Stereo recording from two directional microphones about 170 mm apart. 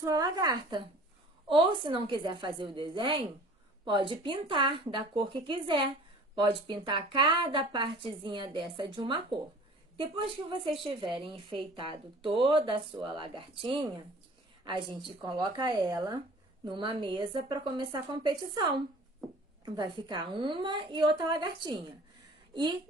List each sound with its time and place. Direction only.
0.0 s a woman's voice: 25° right (ahead or behind)